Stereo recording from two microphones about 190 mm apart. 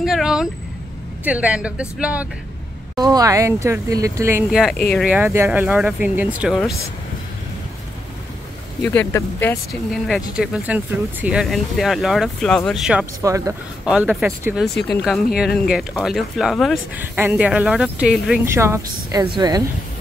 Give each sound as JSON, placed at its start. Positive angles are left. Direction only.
{"t": 0.0, "sound": "speech", "side_deg": 0}
{"t": 3.0, "sound": "speech", "side_deg": -20}
{"t": 4.5, "sound": "speech", "side_deg": -5}
{"t": 8.8, "sound": "speech", "side_deg": 10}
{"t": 13.2, "sound": "speech", "side_deg": -15}
{"t": 14.4, "sound": "speech", "side_deg": -5}
{"t": 18.4, "sound": "speech", "side_deg": -15}